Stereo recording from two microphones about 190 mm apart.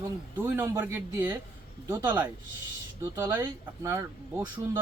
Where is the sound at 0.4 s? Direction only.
10° right (ahead or behind).